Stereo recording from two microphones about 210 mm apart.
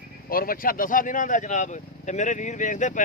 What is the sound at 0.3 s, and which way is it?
Speech, 45° left (ahead or behind).